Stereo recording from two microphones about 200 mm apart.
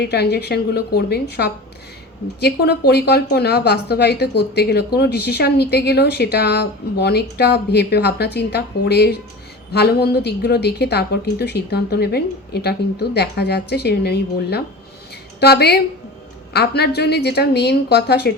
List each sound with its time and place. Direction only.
0.0 s a woman's voice: 55° left (ahead or behind)